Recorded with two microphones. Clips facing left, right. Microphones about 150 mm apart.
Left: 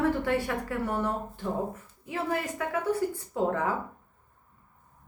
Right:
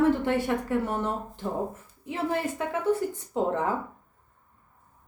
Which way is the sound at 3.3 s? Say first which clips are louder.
Right 1 dB; 20° right (ahead or behind).